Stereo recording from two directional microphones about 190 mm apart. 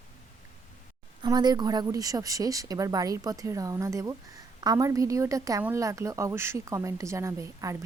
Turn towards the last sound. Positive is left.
turn(degrees=-15)  # may be behind; listen again after turning